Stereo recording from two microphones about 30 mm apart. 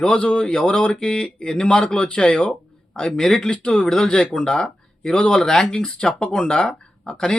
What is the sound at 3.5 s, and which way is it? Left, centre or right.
Speech, left.